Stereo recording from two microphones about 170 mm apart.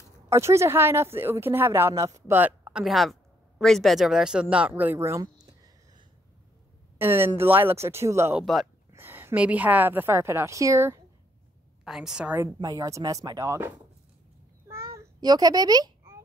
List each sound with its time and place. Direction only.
0.3 s speech: 15° right (ahead or behind)
8.4 s a woman's voice: centre (ahead or behind)
8.9 s a woman's voice: 10° right (ahead or behind)
11.8 s a woman's voice: 5° right (ahead or behind)
12.5 s speech: 25° right (ahead or behind)
15.0 s a sound: 25° right (ahead or behind)